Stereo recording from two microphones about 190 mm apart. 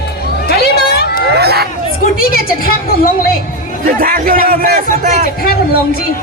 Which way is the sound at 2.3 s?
50° left (ahead or behind).